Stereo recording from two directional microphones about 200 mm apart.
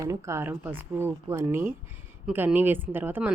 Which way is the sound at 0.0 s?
15° right (ahead or behind).